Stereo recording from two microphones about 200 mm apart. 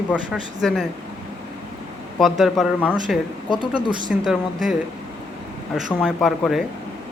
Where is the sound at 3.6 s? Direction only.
25° right (ahead or behind).